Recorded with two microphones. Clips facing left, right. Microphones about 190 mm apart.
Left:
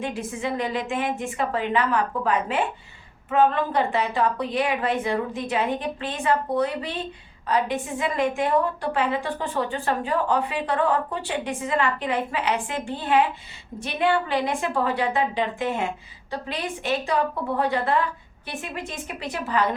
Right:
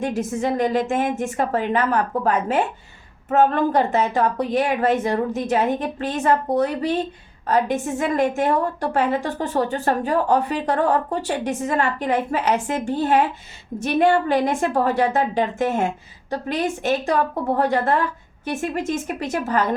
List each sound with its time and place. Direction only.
0.0 s a woman's voice: 45° right (ahead or behind)